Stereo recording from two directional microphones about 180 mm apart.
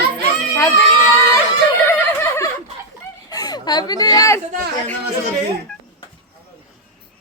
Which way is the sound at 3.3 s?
20° left (ahead or behind).